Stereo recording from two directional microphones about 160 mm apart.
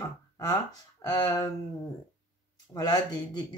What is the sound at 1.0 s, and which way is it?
Speech, 20° left (ahead or behind).